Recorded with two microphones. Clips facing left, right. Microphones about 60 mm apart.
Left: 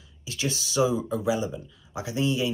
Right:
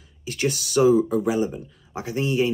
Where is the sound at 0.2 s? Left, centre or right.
Right.